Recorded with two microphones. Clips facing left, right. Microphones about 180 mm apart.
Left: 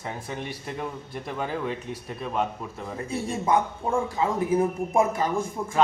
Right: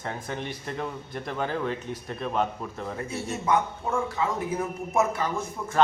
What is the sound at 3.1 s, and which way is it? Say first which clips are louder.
A man's voice: left 2 dB; 30° left (ahead or behind).